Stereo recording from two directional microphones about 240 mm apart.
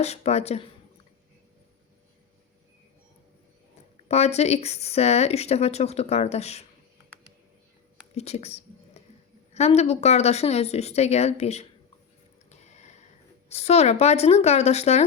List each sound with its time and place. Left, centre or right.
0.0 s speech: left
4.1 s speech: left
8.1 s speech: left
12.5 s a sound: left
13.5 s speech: left